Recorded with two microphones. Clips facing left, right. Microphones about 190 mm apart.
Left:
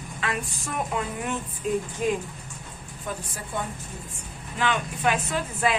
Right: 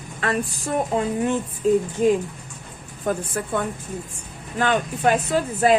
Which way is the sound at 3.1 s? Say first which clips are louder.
Right 10 dB; 50° right (ahead or behind).